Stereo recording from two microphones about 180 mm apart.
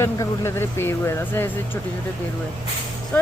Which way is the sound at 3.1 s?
10° left (ahead or behind).